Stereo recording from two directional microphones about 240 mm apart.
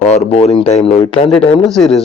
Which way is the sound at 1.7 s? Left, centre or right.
Centre.